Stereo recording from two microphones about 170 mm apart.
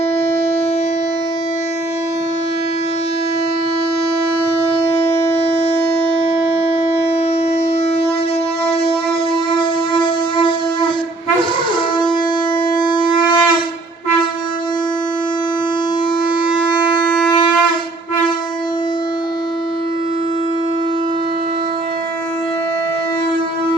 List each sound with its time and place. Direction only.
4.9 s a sound: 40° left (ahead or behind)
9.6 s wind instrument: 30° left (ahead or behind)
12.8 s shofar: 30° left (ahead or behind)
16.6 s siren: 25° left (ahead or behind)
17.1 s shofar: 5° left (ahead or behind)